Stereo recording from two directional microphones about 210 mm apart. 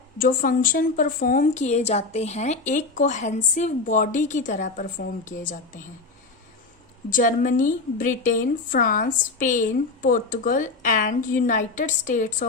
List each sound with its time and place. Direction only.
0.2 s a woman's voice: 40° left (ahead or behind)
7.1 s a woman's voice: 40° left (ahead or behind)